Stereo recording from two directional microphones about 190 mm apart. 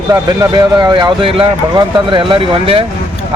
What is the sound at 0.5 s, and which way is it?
Speech, 20° right (ahead or behind).